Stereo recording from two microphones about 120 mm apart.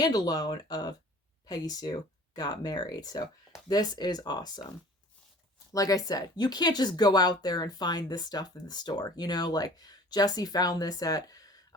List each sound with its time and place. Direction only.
0.0 s speech: 35° left (ahead or behind)
5.7 s speech: 30° left (ahead or behind)